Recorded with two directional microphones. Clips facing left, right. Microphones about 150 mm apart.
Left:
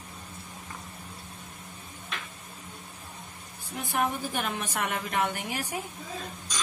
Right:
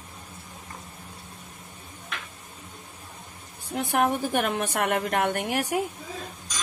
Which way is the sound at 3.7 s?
65° right (ahead or behind).